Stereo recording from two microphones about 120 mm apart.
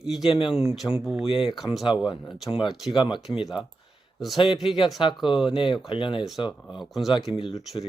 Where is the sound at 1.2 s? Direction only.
45° left (ahead or behind).